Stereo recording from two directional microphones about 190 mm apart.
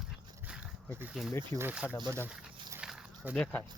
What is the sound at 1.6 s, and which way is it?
Speech, 10° right (ahead or behind).